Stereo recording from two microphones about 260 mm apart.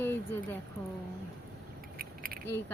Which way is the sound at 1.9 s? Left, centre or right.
Right.